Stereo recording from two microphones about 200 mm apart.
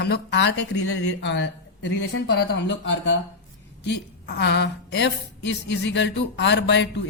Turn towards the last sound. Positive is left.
turn(degrees=60)  # may be behind; listen again after turning